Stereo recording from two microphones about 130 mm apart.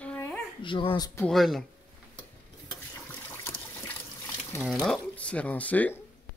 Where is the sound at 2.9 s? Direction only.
15° left (ahead or behind).